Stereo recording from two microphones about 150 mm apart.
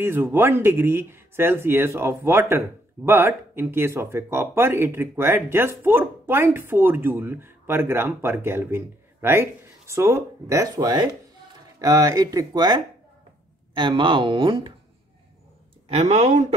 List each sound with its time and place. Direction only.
0.0 s speech: 15° right (ahead or behind); by 14.7 s 35° right (ahead or behind)
15.9 s speech: 45° right (ahead or behind)